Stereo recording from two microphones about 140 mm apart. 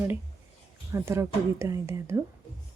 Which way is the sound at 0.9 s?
20° right (ahead or behind).